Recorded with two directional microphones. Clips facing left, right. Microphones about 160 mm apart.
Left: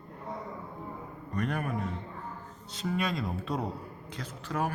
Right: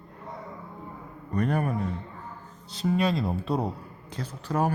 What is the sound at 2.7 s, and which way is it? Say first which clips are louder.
Speech: right 6 dB; 30° right (ahead or behind).